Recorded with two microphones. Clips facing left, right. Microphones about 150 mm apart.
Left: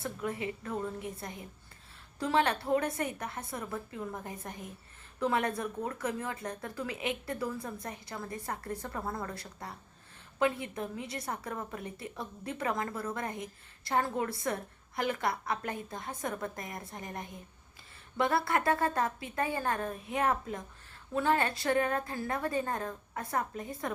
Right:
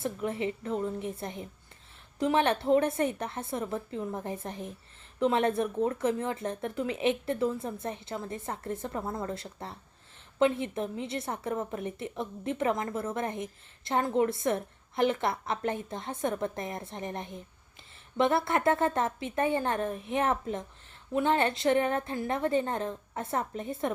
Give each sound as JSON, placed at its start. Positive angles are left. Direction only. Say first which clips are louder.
{"t": 0.0, "sound": "a woman's voice", "louder": "right 4 dB", "side_deg": -25}